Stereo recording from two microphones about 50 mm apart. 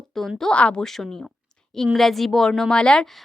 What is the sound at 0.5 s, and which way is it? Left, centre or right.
Speech, left.